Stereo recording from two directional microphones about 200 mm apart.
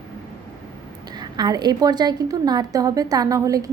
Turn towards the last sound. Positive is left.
turn(degrees=-15)  # may be behind; listen again after turning